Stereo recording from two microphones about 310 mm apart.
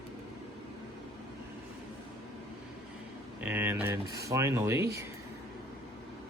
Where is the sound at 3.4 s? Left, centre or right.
Centre.